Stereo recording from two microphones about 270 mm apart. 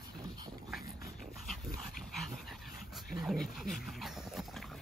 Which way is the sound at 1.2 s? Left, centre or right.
Centre.